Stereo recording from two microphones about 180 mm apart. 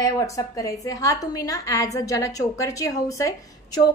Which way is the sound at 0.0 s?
20° left (ahead or behind).